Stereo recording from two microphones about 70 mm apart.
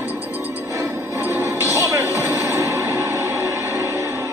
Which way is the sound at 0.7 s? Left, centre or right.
Right.